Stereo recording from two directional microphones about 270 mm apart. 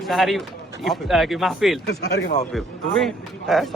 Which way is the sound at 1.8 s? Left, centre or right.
Left.